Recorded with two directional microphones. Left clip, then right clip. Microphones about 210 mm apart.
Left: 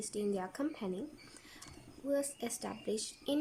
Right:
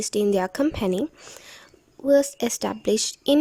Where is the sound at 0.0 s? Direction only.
45° right (ahead or behind).